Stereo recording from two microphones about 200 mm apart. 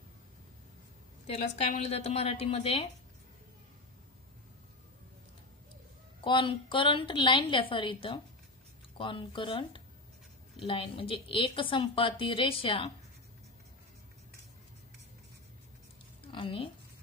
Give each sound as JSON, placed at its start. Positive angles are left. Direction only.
{"t": 1.2, "sound": "a woman's voice", "side_deg": 30}
{"t": 6.2, "sound": "a woman's voice", "side_deg": 25}
{"t": 16.3, "sound": "speech", "side_deg": 25}